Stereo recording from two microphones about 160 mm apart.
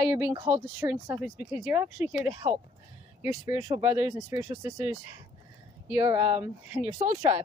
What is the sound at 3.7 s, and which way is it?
Speech, 10° right (ahead or behind).